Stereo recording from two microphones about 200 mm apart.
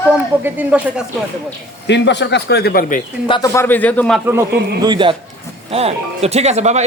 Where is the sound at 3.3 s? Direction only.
20° left (ahead or behind).